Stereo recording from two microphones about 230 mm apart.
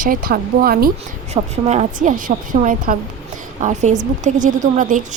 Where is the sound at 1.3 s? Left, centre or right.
Right.